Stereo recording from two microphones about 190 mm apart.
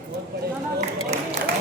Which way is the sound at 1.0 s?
35° right (ahead or behind).